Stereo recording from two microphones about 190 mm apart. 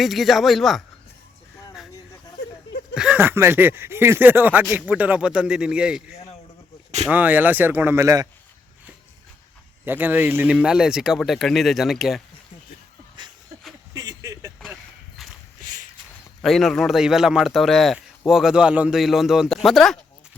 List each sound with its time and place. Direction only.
0.0 s speech: centre (ahead or behind)
2.9 s speech: 5° right (ahead or behind)
9.8 s speech: 10° right (ahead or behind)
13.2 s a sound: 25° right (ahead or behind)
15.6 s walk: 45° right (ahead or behind)
16.4 s speech: centre (ahead or behind)